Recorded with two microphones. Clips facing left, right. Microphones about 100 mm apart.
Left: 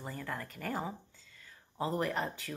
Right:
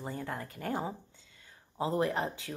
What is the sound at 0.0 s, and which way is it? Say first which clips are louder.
Speech: right 2 dB; 20° right (ahead or behind).